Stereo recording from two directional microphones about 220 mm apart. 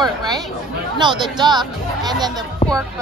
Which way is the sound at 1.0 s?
20° right (ahead or behind).